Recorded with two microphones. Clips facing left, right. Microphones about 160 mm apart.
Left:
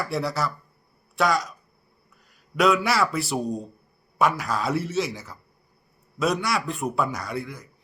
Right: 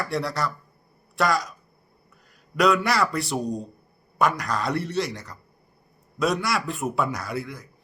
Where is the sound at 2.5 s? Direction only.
Centre (ahead or behind).